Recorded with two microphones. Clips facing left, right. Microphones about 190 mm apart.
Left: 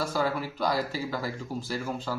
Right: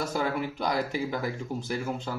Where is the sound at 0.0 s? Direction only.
20° right (ahead or behind).